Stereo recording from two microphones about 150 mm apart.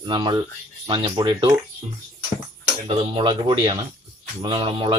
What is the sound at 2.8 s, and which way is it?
Speech, 35° right (ahead or behind).